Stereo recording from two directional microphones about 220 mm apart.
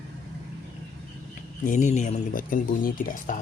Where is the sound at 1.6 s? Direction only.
35° left (ahead or behind).